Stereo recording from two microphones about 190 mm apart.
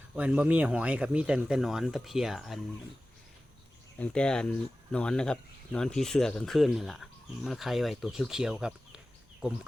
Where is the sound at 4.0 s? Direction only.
5° left (ahead or behind).